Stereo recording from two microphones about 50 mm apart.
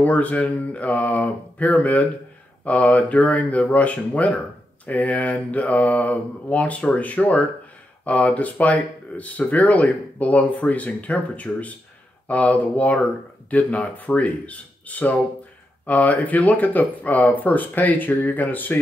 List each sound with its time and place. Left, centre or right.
0.0 s mantra: left
13.5 s speech: left